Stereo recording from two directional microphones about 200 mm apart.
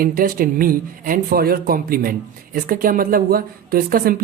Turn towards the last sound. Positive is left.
turn(degrees=-45)  # may be behind; listen again after turning